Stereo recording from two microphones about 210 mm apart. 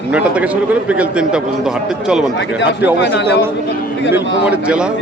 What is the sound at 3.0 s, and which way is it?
Speech, 55° left (ahead or behind).